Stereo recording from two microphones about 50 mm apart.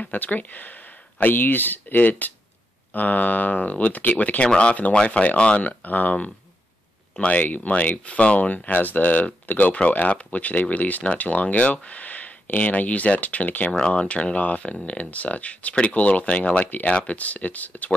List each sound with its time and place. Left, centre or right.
0.0 s speech: left
13.7 s speech: left